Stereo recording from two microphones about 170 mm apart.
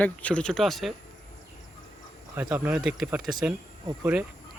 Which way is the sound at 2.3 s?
10° right (ahead or behind).